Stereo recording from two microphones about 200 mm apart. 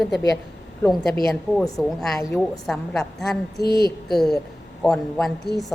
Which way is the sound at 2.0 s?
Centre (ahead or behind).